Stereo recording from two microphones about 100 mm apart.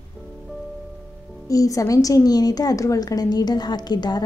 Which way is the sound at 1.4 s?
35° left (ahead or behind).